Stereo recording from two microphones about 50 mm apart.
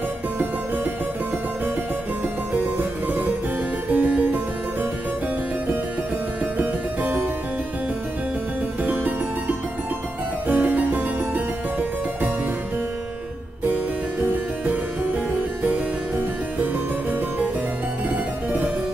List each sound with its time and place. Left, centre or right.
3.9 s music: right
6.6 s music: right
8.9 s music: right
15.6 s music: right
18.1 s music: right